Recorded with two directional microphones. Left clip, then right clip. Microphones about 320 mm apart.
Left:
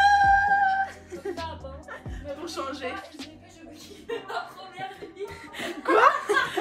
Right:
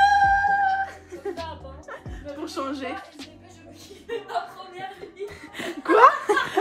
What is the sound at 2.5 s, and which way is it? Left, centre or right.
Speech, centre.